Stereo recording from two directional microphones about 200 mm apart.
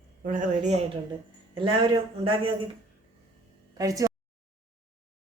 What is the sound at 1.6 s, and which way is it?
Speech, 25° right (ahead or behind).